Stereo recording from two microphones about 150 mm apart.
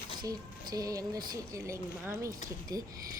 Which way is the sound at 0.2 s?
25° right (ahead or behind).